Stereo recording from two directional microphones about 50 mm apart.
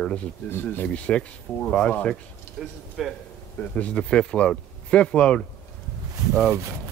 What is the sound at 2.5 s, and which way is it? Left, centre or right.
Speech, centre.